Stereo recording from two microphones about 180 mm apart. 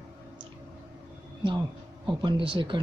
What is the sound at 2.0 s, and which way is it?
Speech, 25° right (ahead or behind).